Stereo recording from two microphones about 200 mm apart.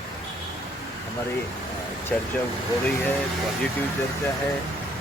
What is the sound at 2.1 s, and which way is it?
Speech, 10° left (ahead or behind).